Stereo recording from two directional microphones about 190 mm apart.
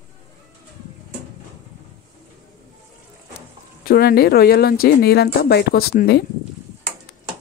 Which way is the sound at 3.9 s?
55° left (ahead or behind).